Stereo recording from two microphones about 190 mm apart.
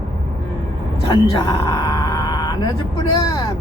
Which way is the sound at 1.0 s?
25° left (ahead or behind).